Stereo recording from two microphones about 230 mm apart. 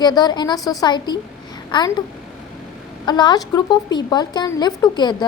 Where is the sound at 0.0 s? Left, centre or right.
Centre.